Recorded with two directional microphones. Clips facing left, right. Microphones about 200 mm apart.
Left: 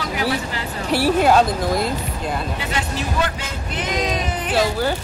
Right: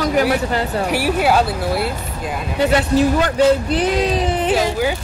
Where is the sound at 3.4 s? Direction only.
35° right (ahead or behind).